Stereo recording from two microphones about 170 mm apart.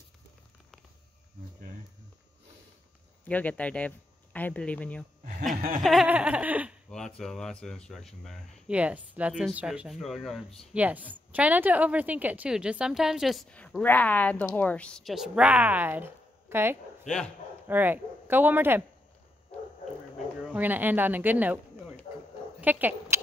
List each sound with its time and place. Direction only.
3.3 s speech: 10° left (ahead or behind)
5.5 s chuckle: 55° right (ahead or behind)
5.8 s speech: centre (ahead or behind)
6.9 s a woman's voice: 5° left (ahead or behind); by 18.8 s 10° right (ahead or behind)
20.4 s speech: 10° right (ahead or behind)
22.6 s dog: 10° right (ahead or behind)